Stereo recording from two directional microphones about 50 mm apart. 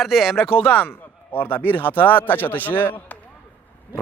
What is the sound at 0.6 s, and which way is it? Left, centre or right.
Speech, left.